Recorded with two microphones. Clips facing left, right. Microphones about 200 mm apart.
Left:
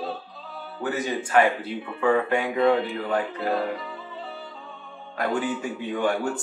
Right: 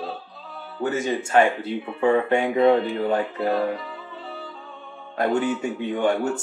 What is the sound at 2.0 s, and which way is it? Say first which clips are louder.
Speech: right 3 dB; 20° right (ahead or behind).